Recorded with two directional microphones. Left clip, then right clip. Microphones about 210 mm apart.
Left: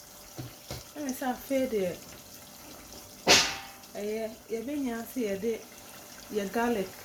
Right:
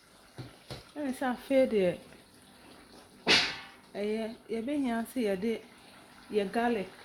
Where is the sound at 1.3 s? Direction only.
55° right (ahead or behind).